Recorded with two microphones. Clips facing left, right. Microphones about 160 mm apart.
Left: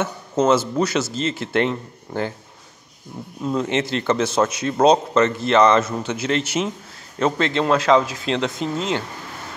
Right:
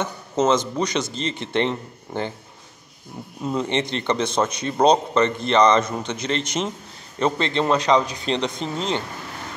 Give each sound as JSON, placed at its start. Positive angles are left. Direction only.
{"t": 0.0, "sound": "speech", "side_deg": 10}
{"t": 3.4, "sound": "speech", "side_deg": 0}